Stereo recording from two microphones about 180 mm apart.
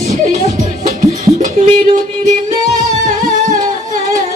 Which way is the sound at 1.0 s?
45° right (ahead or behind).